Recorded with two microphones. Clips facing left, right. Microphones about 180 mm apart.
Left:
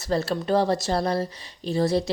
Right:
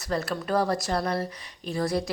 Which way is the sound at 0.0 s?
25° left (ahead or behind).